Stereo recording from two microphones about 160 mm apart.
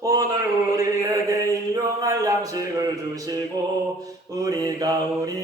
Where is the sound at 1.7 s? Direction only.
20° right (ahead or behind).